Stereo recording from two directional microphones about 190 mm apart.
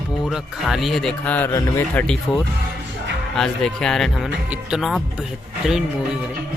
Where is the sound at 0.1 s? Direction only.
Centre (ahead or behind).